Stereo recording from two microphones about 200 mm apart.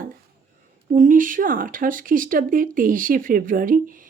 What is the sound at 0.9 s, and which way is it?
Speech, 40° right (ahead or behind).